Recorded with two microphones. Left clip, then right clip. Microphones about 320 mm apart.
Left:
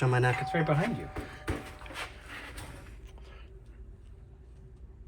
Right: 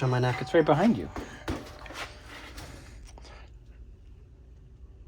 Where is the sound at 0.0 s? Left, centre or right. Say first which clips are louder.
Left 1 dB; centre.